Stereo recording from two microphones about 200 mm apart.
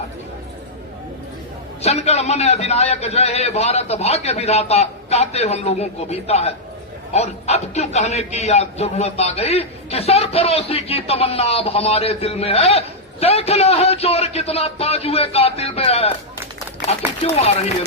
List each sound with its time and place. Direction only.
1.8 s a man's voice: 30° left (ahead or behind)
17.2 s a man's voice: 30° left (ahead or behind)